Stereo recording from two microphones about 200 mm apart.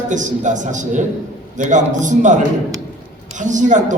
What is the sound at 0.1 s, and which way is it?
A man's voice, 40° right (ahead or behind).